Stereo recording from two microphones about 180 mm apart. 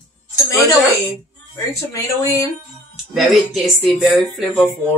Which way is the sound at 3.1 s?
Centre (ahead or behind).